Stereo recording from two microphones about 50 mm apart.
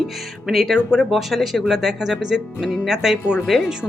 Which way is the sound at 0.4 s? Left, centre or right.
Centre.